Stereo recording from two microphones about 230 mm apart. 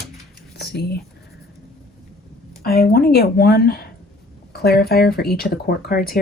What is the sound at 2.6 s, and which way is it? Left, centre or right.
Speech, left.